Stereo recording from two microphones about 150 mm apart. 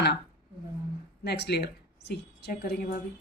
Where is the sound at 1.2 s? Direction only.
90° left.